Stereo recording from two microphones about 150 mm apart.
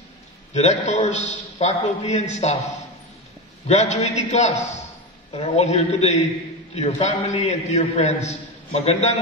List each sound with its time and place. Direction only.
0.5 s a man's voice: 50° left (ahead or behind)
3.6 s a man's voice: 50° left (ahead or behind)